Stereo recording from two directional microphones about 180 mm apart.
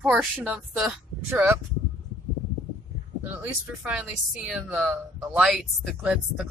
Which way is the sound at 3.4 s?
5° right (ahead or behind).